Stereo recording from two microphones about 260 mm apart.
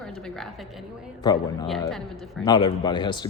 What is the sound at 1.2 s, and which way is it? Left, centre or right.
Speech, centre.